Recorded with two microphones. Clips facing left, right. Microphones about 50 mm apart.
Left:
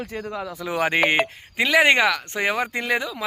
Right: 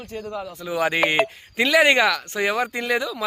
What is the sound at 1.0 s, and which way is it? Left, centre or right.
Speech, centre.